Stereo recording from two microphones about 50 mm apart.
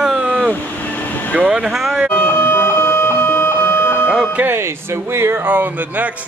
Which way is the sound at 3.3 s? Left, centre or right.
Left.